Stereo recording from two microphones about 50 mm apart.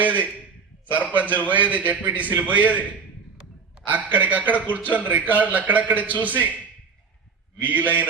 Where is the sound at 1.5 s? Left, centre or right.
Right.